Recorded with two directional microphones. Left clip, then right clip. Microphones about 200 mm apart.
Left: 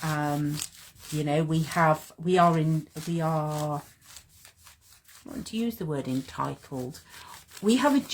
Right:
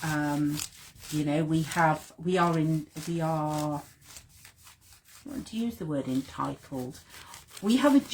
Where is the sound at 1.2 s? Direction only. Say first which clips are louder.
Left 2 dB; 45° left (ahead or behind).